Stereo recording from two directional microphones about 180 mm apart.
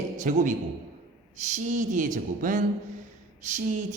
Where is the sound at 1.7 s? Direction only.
45° right (ahead or behind).